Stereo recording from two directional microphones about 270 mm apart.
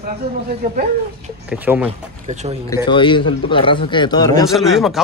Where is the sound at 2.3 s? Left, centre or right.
Right.